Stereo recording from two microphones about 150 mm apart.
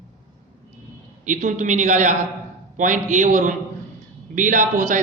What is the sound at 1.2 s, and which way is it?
Speech, 55° right (ahead or behind).